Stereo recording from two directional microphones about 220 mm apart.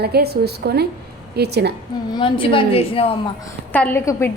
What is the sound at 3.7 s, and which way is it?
Speech, 10° left (ahead or behind).